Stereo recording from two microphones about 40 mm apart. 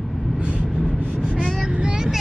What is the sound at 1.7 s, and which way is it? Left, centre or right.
Vehicle, right.